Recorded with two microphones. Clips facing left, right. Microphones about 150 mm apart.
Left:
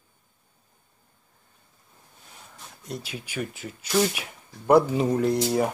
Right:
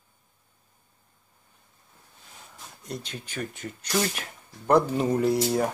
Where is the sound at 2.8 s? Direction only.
Centre (ahead or behind).